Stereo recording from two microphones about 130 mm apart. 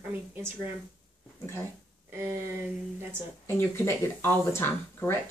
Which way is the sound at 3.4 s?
20° left (ahead or behind).